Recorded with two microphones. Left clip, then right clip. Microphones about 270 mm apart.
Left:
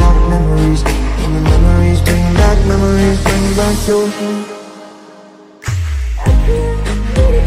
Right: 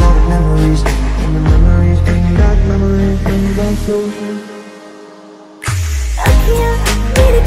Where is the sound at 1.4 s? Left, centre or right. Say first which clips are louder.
Left 4 dB; left.